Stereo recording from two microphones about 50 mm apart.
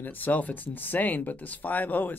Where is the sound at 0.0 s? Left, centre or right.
Left.